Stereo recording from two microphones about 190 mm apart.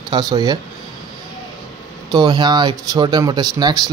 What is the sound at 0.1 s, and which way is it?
Speech, 20° right (ahead or behind).